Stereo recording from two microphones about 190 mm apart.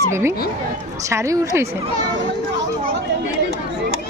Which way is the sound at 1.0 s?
15° right (ahead or behind).